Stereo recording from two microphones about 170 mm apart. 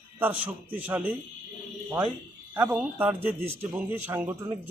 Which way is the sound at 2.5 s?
10° right (ahead or behind).